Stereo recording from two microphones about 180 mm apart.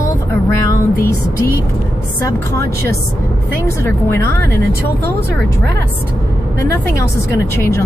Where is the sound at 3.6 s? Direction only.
15° left (ahead or behind).